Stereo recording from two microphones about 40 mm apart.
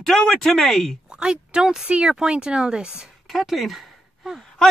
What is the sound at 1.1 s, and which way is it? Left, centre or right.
Speech, right.